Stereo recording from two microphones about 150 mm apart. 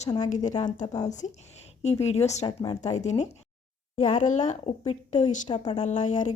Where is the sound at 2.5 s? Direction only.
30° left (ahead or behind).